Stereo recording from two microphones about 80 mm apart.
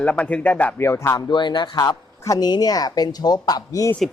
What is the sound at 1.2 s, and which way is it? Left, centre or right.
Speech, left.